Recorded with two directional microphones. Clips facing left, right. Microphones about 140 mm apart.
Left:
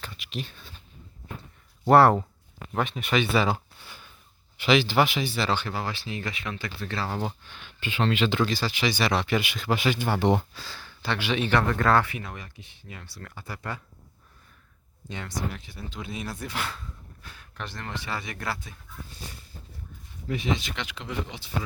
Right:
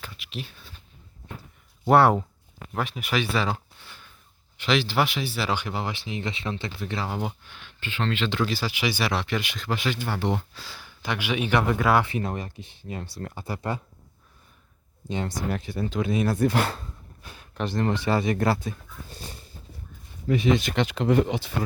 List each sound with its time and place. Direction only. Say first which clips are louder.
0.0 s a sound: left 1 dB; centre (ahead or behind)
1.8 s speech: left 1 dB; centre (ahead or behind)
7.8 s speech: left 3 dB; 15° left (ahead or behind)
8.4 s speech: even; 10° right (ahead or behind); by 10.0 s 5° left (ahead or behind)
10.0 s speech: left 4 dB; 20° left (ahead or behind)
10.5 s speech: left 1 dB; centre (ahead or behind)
10.8 s speech: even; 15° right (ahead or behind)
12.0 s speech: right 8 dB; 35° right (ahead or behind)
15.1 s speech: right 8 dB; 30° right (ahead or behind)
15.5 s speech: right 11 dB; 55° right (ahead or behind); by 16.9 s 40° right (ahead or behind)
17.2 s speech: right 8 dB; 20° right (ahead or behind); by 19.2 s 40° right (ahead or behind)
20.2 s speech: right 7 dB; 55° right (ahead or behind)